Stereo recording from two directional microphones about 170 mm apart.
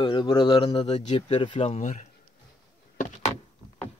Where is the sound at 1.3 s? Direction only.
30° left (ahead or behind).